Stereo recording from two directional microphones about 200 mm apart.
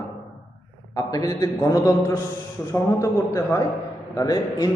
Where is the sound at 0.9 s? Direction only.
15° left (ahead or behind).